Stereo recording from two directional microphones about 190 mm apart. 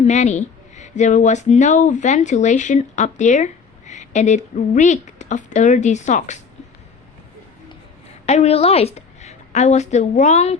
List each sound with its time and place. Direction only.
0.0 s a woman's voice: 35° left (ahead or behind)
8.3 s a woman's voice: 35° left (ahead or behind)